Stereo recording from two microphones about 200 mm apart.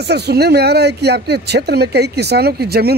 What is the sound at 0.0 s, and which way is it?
Speech, 55° right (ahead or behind).